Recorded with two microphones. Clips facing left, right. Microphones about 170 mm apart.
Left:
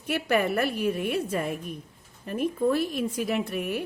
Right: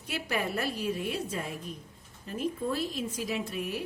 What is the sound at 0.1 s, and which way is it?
A woman's voice, 60° left (ahead or behind).